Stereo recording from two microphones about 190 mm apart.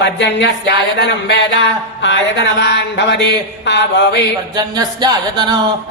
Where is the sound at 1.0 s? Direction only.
65° left (ahead or behind).